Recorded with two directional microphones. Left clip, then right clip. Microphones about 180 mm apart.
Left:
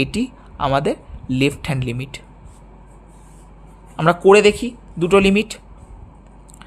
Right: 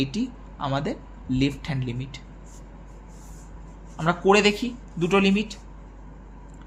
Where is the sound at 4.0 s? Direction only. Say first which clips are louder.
Left 8 dB; 45° left (ahead or behind).